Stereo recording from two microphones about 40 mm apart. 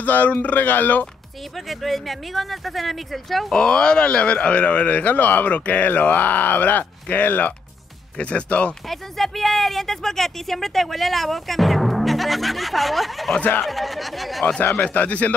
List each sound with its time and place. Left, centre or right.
0.0 s speech: left
1.7 s speech: centre
3.5 s speech: left
8.2 s speech: left
8.8 s speech: centre
14.8 s speech: left